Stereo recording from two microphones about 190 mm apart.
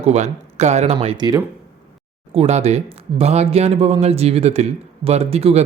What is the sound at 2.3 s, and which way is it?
Speech, 35° right (ahead or behind).